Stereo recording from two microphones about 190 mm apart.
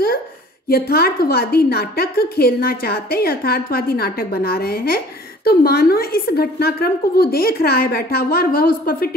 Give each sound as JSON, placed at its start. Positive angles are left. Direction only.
{"t": 0.7, "sound": "a woman's voice", "side_deg": 55}